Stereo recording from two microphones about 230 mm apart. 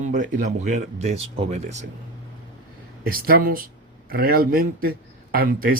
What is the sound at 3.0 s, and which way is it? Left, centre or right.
A man's voice, right.